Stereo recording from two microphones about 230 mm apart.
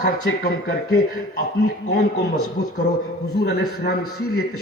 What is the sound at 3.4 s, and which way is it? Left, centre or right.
Speech, left.